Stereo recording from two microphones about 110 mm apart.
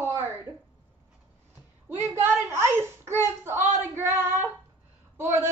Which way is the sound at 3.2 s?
25° right (ahead or behind).